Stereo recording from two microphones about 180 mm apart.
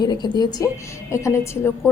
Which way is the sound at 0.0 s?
25° left (ahead or behind).